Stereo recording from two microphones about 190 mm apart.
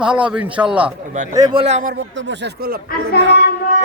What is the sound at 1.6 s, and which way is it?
Speech, 35° right (ahead or behind).